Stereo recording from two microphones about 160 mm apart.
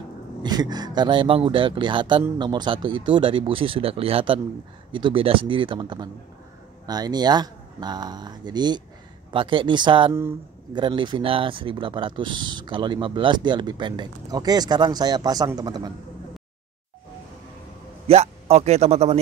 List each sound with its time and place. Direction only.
0.4 s speech: 25° right (ahead or behind)
18.0 s a man's voice: 40° right (ahead or behind)